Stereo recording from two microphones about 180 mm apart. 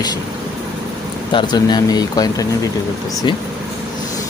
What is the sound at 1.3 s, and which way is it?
Speech, 25° left (ahead or behind).